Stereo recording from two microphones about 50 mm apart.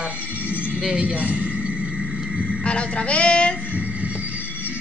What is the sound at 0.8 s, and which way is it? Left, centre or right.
Speech, right.